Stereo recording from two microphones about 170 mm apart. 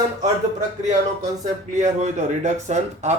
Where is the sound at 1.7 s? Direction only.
45° right (ahead or behind).